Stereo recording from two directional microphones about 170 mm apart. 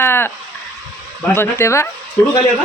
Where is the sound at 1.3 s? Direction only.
15° left (ahead or behind).